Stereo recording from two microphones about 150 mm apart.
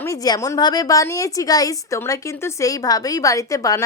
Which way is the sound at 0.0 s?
20° left (ahead or behind).